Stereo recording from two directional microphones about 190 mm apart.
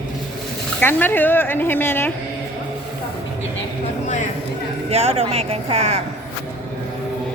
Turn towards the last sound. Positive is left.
turn(degrees=-35)  # may be behind; listen again after turning